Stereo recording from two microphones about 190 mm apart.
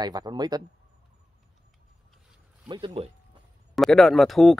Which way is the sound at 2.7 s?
25° right (ahead or behind).